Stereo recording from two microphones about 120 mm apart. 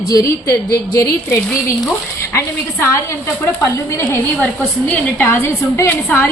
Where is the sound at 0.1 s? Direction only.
25° left (ahead or behind).